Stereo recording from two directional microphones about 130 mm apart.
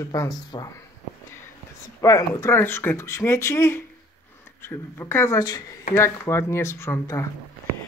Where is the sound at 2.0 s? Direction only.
25° left (ahead or behind).